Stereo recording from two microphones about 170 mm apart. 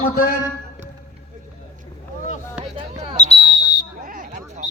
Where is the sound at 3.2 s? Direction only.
45° left (ahead or behind).